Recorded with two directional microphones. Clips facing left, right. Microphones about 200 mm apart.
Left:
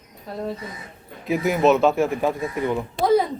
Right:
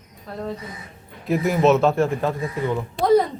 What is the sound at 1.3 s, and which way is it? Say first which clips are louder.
Speech: right 1 dB; centre (ahead or behind).